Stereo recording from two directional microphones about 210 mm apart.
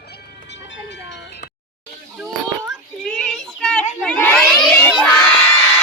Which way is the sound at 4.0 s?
5° left (ahead or behind).